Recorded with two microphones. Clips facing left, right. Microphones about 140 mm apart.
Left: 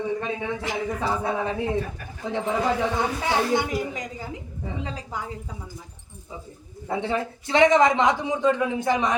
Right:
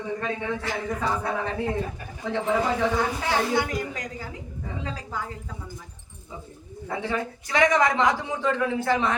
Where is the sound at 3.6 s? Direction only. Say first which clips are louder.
Even; 20° left (ahead or behind).